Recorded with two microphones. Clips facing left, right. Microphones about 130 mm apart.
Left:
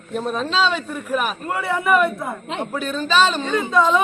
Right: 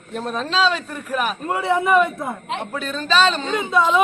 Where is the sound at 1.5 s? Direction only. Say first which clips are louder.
Right 1 dB; 20° right (ahead or behind).